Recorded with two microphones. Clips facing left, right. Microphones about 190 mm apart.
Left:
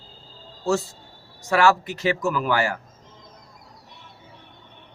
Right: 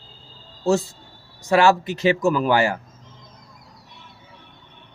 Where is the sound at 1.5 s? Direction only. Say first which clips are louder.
Right 3 dB; 25° right (ahead or behind).